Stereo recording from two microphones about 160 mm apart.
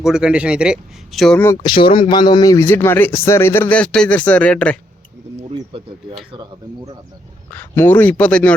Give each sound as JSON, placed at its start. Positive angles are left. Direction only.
{"t": 0.0, "sound": "a man's voice", "side_deg": -5}
{"t": 1.8, "sound": "a man's voice", "side_deg": 30}
{"t": 5.5, "sound": "speech", "side_deg": -35}
{"t": 7.5, "sound": "a man's voice", "side_deg": 10}